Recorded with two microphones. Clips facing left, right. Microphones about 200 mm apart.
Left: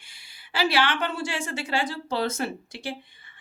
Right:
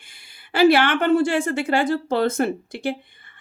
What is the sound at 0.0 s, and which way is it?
A woman's voice, 55° right (ahead or behind).